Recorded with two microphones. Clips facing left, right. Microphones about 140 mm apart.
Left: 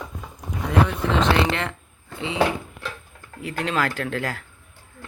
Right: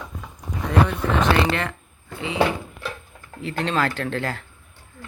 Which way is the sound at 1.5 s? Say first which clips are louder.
Right 1 dB; 20° left (ahead or behind).